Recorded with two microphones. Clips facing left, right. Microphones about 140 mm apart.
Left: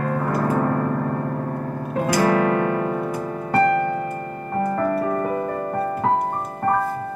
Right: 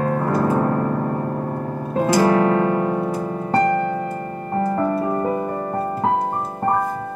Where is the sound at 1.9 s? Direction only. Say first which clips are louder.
Right 3 dB; 25° right (ahead or behind).